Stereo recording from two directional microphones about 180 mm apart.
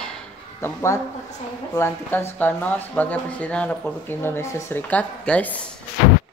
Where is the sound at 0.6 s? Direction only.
15° left (ahead or behind).